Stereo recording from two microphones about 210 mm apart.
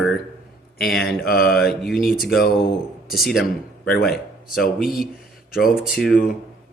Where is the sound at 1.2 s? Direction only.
45° left (ahead or behind).